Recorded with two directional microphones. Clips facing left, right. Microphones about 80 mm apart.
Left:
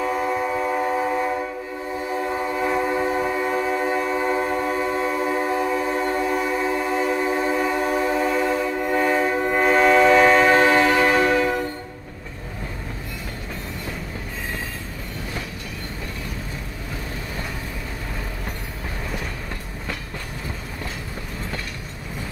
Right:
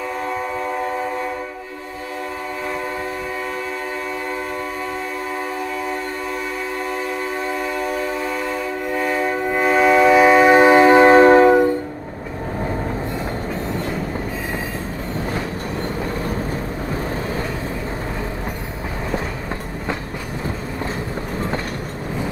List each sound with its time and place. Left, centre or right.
0.0 s train: centre
2.6 s train: centre
7.4 s train: centre; by 11.5 s right